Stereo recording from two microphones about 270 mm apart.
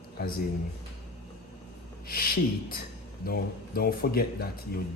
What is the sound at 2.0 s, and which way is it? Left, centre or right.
Speech, left.